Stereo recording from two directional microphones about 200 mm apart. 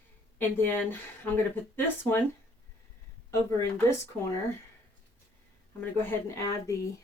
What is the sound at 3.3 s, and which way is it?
Speech, 10° left (ahead or behind).